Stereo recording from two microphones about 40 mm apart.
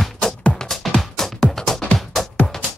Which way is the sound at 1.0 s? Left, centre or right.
Centre.